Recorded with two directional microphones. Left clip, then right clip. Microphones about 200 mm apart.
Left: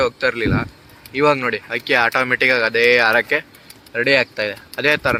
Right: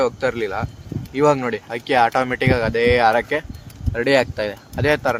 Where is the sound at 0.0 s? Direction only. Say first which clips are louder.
Left 2 dB; 20° right (ahead or behind).